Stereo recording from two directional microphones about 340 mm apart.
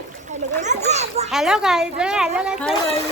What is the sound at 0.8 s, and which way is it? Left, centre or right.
Children playing, centre.